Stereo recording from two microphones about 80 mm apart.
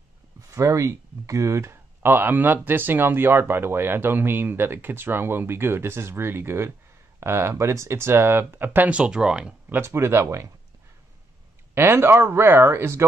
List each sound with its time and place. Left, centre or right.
0.6 s speech: right; by 9.6 s centre
9.7 s speech: right
11.7 s speech: right